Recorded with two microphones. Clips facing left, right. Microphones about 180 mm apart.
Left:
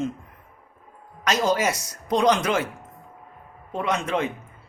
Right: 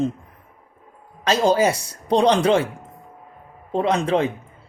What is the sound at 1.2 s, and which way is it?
Speech, 30° right (ahead or behind).